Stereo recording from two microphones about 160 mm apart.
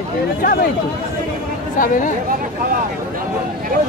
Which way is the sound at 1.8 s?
55° left (ahead or behind).